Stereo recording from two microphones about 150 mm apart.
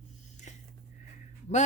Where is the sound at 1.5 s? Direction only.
50° left (ahead or behind).